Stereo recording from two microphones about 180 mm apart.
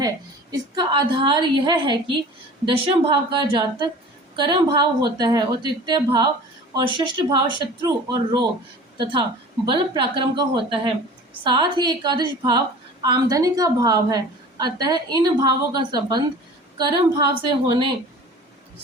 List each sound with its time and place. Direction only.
0.5 s a woman's voice: 25° right (ahead or behind)
9.6 s a woman's voice: 25° right (ahead or behind)